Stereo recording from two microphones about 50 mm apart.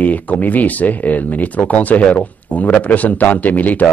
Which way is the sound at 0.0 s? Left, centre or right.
Left.